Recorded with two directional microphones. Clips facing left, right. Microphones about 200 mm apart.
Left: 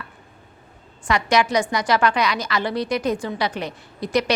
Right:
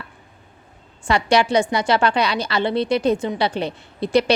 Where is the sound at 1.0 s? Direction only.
30° right (ahead or behind).